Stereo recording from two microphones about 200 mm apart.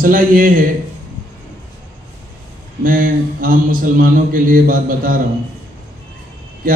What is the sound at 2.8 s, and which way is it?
A man's voice, 45° right (ahead or behind).